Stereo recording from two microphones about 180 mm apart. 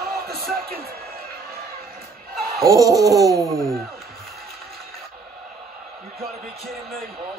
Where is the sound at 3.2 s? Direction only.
15° right (ahead or behind).